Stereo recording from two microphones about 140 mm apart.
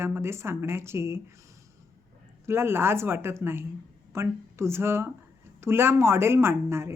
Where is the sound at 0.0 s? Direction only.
15° right (ahead or behind).